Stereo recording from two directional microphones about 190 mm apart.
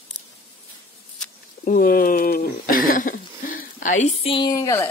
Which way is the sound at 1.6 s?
45° left (ahead or behind).